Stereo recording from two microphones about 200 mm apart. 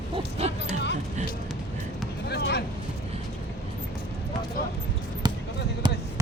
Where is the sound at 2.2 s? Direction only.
55° left (ahead or behind).